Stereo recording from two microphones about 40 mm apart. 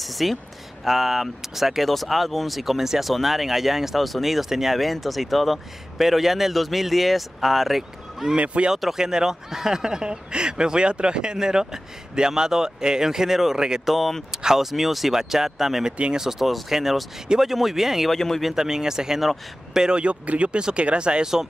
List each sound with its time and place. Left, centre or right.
0.0 s a sound: centre
0.8 s speech: centre
9.0 s speech: centre
13.8 s speech: centre
14.3 s speech: centre
18.1 s speech: centre
18.4 s speech: centre